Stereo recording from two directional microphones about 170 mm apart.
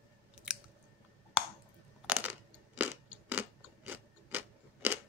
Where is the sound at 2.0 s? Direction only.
10° right (ahead or behind).